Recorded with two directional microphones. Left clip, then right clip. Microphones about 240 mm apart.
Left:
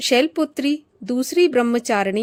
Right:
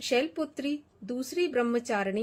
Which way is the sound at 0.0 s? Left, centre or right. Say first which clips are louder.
Left 10 dB; left.